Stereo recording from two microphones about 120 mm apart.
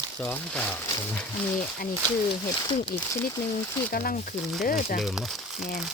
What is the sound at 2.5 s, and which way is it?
Speech, 45° left (ahead or behind).